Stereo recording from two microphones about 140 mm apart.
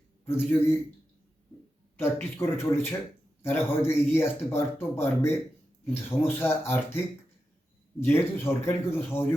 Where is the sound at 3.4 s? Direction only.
15° left (ahead or behind).